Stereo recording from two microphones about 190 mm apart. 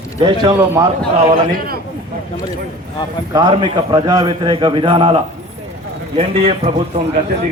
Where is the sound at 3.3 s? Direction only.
25° right (ahead or behind).